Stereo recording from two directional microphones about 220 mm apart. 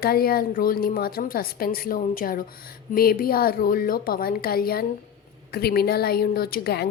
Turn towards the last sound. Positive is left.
turn(degrees=45)  # may be behind; listen again after turning